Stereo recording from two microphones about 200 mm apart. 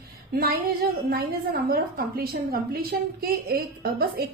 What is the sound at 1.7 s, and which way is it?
A woman's voice, 50° right (ahead or behind).